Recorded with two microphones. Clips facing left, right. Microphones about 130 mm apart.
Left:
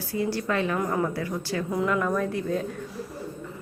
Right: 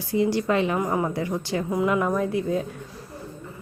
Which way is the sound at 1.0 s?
20° right (ahead or behind).